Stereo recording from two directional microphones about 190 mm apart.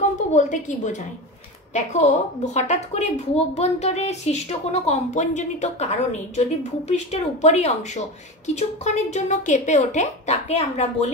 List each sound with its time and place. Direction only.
0.3 s a woman's voice: 40° left (ahead or behind)